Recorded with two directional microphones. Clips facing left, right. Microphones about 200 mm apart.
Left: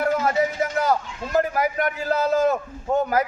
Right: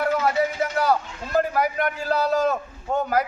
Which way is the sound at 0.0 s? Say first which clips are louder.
Left 1 dB; 45° left (ahead or behind).